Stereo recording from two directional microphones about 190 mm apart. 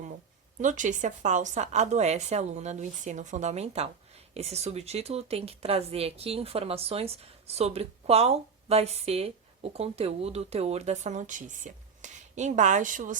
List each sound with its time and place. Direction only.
0.6 s speech: 40° right (ahead or behind)